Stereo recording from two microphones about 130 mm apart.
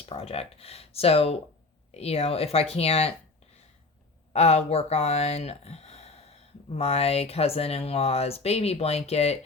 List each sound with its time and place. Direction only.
0.0 s speech: 50° left (ahead or behind)
4.3 s speech: 55° left (ahead or behind)